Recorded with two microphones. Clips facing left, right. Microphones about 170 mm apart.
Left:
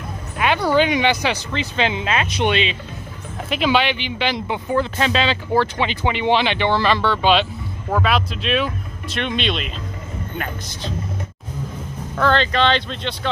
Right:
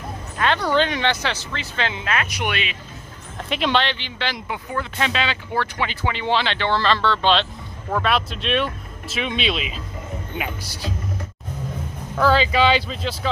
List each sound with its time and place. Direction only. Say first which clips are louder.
0.4 s speech: left 3 dB; 10° left (ahead or behind)
3.4 s speech: left 3 dB; centre (ahead or behind); by 4.6 s 20° left (ahead or behind)
4.7 s speech: left 5 dB; 35° left (ahead or behind)
5.9 s speech: left 4 dB; 20° left (ahead or behind); by 10.9 s 5° right (ahead or behind)
12.2 s speech: even; 5° right (ahead or behind)